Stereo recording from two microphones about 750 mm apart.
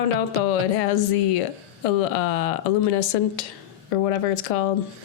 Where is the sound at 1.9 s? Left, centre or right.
Left.